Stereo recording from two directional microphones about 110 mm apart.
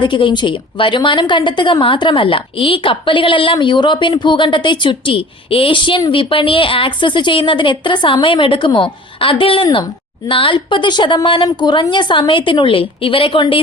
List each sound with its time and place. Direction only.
0.0 s a woman's voice: 45° left (ahead or behind)